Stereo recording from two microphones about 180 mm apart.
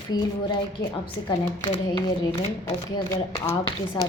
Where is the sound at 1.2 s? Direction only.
25° left (ahead or behind).